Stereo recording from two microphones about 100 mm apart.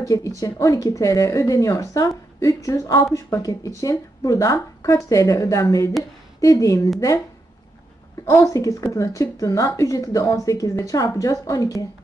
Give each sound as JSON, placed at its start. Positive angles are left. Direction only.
{"t": 0.0, "sound": "speech", "side_deg": 35}
{"t": 8.3, "sound": "speech", "side_deg": 35}